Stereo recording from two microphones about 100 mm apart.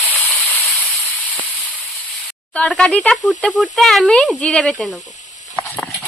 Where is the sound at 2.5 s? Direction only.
10° left (ahead or behind).